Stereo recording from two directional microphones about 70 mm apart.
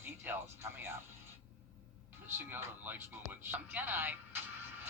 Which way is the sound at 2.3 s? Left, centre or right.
Right.